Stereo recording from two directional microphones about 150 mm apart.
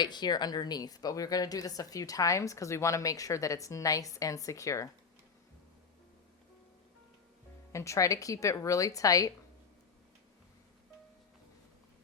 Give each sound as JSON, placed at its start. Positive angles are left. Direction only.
{"t": 0.0, "sound": "a woman's voice", "side_deg": 30}
{"t": 7.7, "sound": "a woman's voice", "side_deg": 20}